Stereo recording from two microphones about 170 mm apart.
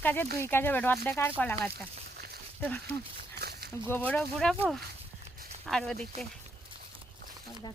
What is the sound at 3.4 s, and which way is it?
Walk, 70° right (ahead or behind).